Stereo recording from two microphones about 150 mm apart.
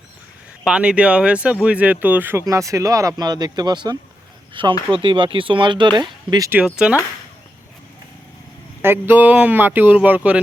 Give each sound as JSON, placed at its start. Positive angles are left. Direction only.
{"t": 0.6, "sound": "speech", "side_deg": -5}
{"t": 6.5, "sound": "speech", "side_deg": -5}
{"t": 8.8, "sound": "speech", "side_deg": -15}